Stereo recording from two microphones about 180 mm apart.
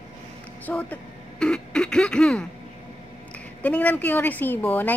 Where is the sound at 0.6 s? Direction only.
10° left (ahead or behind).